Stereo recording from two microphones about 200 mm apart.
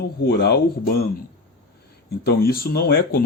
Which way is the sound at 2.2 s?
50° left (ahead or behind).